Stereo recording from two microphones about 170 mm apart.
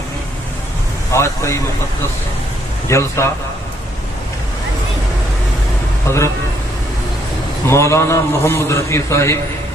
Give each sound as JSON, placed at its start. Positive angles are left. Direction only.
{"t": 1.1, "sound": "a man's voice", "side_deg": 15}
{"t": 2.8, "sound": "a man's voice", "side_deg": 15}
{"t": 6.1, "sound": "a man's voice", "side_deg": 15}
{"t": 7.7, "sound": "a man's voice", "side_deg": 15}